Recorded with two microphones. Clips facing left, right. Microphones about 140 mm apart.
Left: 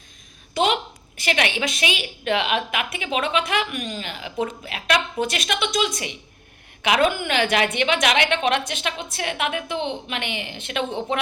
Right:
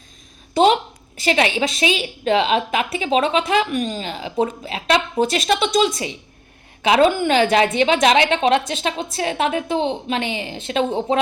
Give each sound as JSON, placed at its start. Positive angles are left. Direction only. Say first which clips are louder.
{"t": 0.5, "sound": "a woman's voice", "louder": "right 6 dB", "side_deg": -35}